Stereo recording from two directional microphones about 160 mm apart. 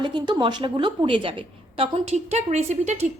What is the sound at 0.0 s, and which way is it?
A woman's voice, 30° right (ahead or behind).